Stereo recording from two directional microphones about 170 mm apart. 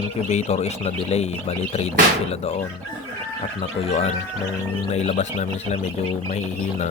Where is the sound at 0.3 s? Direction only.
40° left (ahead or behind).